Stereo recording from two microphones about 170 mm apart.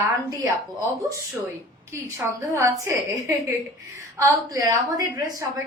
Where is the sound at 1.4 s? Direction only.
15° right (ahead or behind).